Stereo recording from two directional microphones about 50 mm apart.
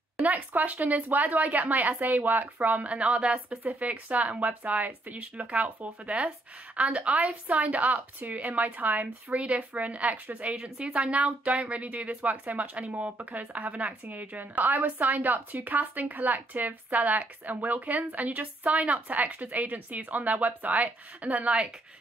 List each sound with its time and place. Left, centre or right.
0.2 s speech: right
10.5 s speech: centre